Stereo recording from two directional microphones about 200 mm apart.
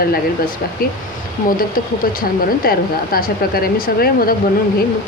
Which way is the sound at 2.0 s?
45° left (ahead or behind).